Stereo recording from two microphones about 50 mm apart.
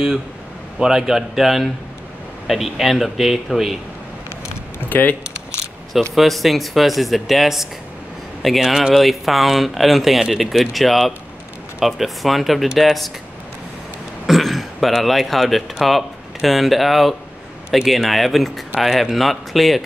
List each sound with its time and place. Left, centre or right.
0.7 s a man's voice: centre
4.7 s speech: left
6.1 s a man's voice: centre
14.2 s speech: centre